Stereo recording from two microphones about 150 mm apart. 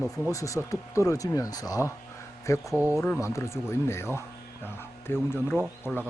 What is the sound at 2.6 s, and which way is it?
Speech, 10° right (ahead or behind).